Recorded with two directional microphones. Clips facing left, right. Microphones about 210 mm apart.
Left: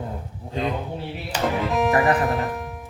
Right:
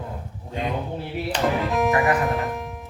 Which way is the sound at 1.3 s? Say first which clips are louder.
Right 1 dB; 5° left (ahead or behind).